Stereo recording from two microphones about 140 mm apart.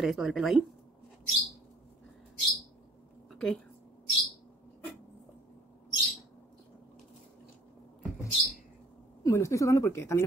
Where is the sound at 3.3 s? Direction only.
5° left (ahead or behind).